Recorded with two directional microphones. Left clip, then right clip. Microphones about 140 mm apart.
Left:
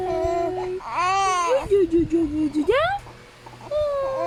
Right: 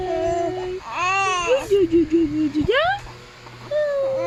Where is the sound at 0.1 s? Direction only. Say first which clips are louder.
Right 2 dB; 30° left (ahead or behind).